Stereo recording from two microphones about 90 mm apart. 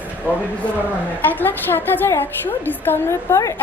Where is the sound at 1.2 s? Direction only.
20° left (ahead or behind).